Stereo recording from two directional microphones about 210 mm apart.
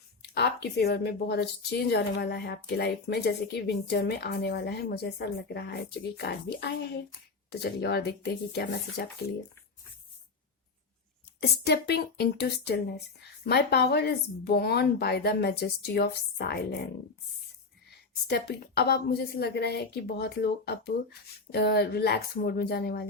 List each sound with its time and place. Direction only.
0.2 s speech: 50° left (ahead or behind)
11.3 s speech: 50° left (ahead or behind)
18.3 s speech: 50° left (ahead or behind)